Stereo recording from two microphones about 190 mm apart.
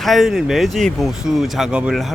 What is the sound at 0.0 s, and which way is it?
Speech, centre (ahead or behind).